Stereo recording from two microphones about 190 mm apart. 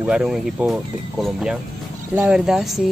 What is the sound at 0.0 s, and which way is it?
Speech, 5° right (ahead or behind).